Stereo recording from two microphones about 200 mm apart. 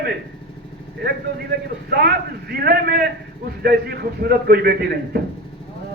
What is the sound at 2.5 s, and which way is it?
A man's voice, 50° right (ahead or behind).